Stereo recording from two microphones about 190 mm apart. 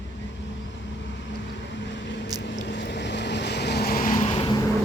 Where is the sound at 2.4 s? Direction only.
65° left (ahead or behind); by 4.4 s 40° left (ahead or behind).